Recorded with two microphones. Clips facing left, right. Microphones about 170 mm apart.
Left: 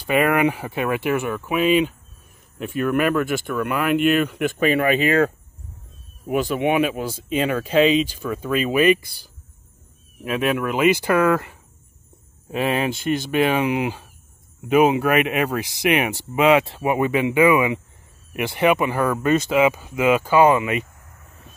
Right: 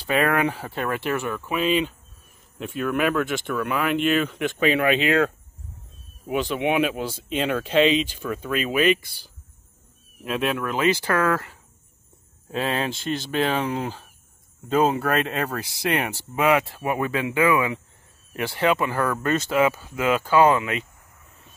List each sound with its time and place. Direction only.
0.0 s speech: 15° left (ahead or behind)
10.1 s speech: 5° left (ahead or behind)